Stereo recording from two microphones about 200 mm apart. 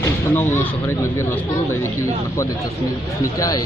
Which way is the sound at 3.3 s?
20° left (ahead or behind).